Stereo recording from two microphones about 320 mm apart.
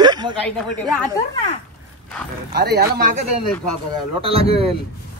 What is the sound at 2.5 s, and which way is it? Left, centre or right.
Speech, right.